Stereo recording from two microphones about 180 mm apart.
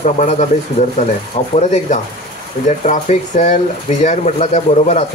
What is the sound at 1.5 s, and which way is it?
Speech, 40° left (ahead or behind).